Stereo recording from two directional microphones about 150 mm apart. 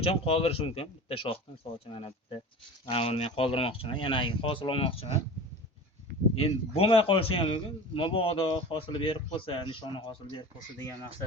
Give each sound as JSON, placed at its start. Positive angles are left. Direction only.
{"t": 0.0, "sound": "a man's voice", "side_deg": 40}
{"t": 6.3, "sound": "a man's voice", "side_deg": 40}